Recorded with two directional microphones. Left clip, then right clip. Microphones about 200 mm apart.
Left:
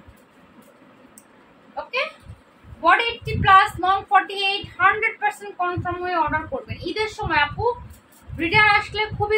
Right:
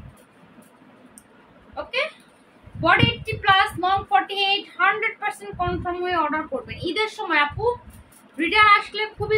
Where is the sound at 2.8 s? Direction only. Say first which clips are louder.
Left 1 dB; 10° right (ahead or behind).